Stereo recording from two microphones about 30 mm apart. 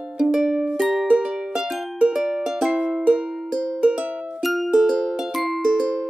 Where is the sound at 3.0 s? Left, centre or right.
Right.